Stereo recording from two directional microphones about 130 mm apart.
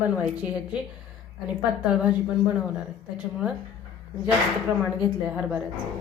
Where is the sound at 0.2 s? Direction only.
10° right (ahead or behind).